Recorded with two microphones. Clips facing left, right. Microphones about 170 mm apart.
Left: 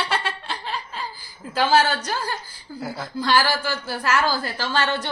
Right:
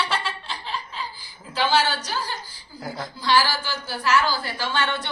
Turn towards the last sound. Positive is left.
turn(degrees=40)  # may be behind; listen again after turning